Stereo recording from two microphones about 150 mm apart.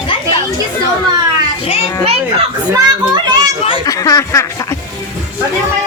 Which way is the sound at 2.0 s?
45° right (ahead or behind).